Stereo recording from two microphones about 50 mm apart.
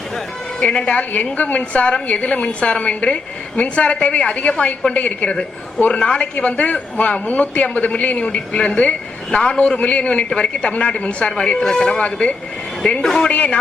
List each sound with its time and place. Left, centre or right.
0.6 s a woman's voice: centre
13.0 s a man's voice: centre
13.3 s a woman's voice: left